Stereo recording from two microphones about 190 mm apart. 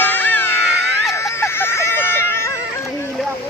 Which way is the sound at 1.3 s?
15° left (ahead or behind).